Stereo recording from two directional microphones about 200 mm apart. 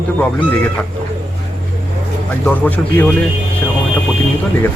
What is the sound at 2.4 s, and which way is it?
Speech, 5° left (ahead or behind).